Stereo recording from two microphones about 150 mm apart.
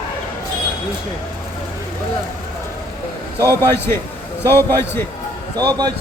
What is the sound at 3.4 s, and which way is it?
A man's voice, 15° left (ahead or behind).